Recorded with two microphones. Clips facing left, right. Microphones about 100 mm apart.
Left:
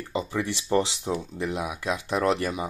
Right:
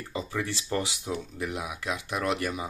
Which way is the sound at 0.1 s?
20° left (ahead or behind).